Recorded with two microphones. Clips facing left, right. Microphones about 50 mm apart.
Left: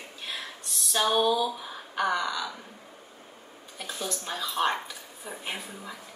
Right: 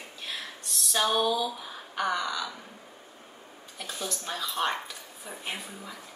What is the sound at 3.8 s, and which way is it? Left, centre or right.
A woman's voice, centre.